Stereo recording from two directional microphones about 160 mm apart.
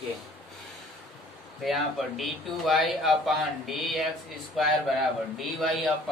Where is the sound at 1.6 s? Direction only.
Centre (ahead or behind).